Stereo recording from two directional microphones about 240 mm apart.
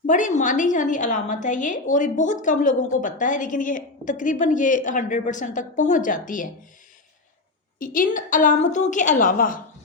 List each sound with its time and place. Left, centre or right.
0.0 s a woman's voice: left
7.8 s a woman's voice: left